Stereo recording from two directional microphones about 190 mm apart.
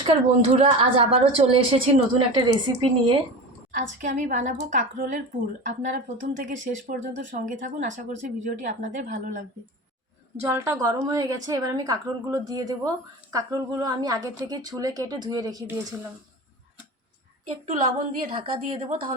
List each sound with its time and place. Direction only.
0.0 s a woman's voice: 30° right (ahead or behind)
3.7 s a woman's voice: 40° right (ahead or behind)
10.4 s a woman's voice: 15° right (ahead or behind)
18.3 s a woman's voice: 30° right (ahead or behind)
18.9 s speech: 45° right (ahead or behind)